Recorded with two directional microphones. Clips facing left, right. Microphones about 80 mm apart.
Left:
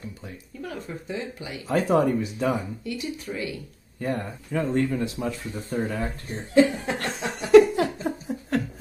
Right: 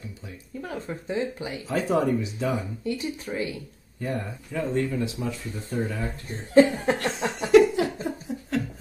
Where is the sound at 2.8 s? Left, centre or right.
Right.